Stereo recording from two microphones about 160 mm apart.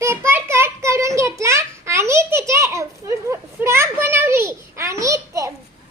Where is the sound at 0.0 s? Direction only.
15° right (ahead or behind).